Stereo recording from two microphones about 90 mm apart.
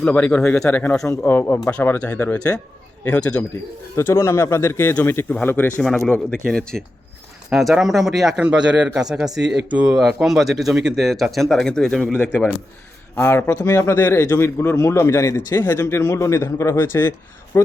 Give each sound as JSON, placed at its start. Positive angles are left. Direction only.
{"t": 0.0, "sound": "a man's voice", "side_deg": 10}
{"t": 3.9, "sound": "a man's voice", "side_deg": 30}
{"t": 5.8, "sound": "speech", "side_deg": 5}
{"t": 7.5, "sound": "a man's voice", "side_deg": -5}
{"t": 12.1, "sound": "speech", "side_deg": 15}
{"t": 13.1, "sound": "a man's voice", "side_deg": 25}